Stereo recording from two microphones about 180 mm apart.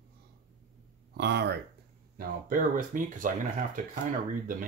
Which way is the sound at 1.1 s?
70° right (ahead or behind).